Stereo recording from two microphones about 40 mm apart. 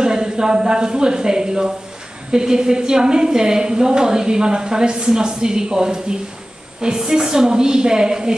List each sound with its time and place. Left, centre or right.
0.0 s a woman's voice: centre